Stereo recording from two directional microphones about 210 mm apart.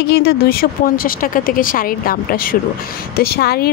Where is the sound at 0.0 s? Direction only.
50° left (ahead or behind).